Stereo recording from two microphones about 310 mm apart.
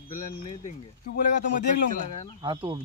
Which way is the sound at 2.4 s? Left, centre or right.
Centre.